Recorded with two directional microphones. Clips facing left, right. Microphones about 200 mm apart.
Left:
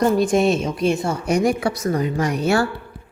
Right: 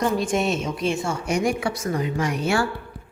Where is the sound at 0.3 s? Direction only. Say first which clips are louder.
Left 5 dB; 40° left (ahead or behind).